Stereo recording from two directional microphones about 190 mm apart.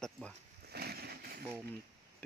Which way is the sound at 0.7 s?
55° right (ahead or behind).